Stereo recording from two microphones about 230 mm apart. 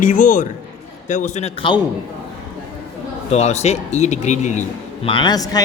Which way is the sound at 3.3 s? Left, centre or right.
Left.